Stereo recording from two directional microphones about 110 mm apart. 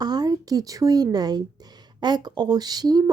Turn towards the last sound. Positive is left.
turn(degrees=-35)  # may be behind; listen again after turning